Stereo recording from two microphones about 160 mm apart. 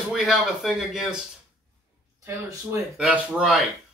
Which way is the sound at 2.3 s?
20° right (ahead or behind).